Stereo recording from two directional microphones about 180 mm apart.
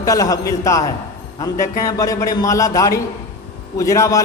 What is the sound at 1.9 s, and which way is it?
A man's voice, 20° left (ahead or behind).